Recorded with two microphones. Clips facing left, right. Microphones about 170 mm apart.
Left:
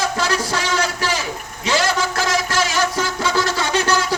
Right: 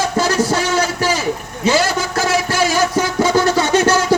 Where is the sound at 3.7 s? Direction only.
45° right (ahead or behind).